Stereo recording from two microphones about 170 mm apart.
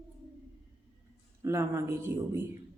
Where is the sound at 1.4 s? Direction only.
15° right (ahead or behind).